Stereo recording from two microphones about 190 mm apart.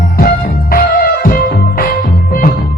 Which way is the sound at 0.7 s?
50° left (ahead or behind).